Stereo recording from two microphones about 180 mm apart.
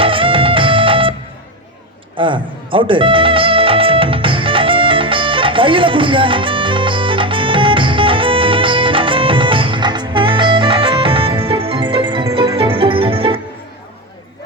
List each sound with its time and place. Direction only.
0.0 s music: 30° right (ahead or behind)
2.1 s music: 25° right (ahead or behind)